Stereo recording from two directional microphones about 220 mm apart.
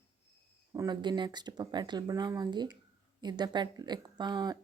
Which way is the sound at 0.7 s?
20° right (ahead or behind).